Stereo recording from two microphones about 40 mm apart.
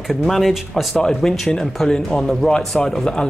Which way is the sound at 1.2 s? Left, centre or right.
Centre.